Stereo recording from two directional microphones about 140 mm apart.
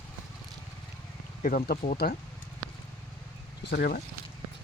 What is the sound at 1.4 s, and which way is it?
Speech, 70° left (ahead or behind).